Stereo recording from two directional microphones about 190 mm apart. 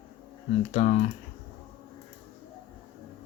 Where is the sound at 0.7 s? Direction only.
35° left (ahead or behind).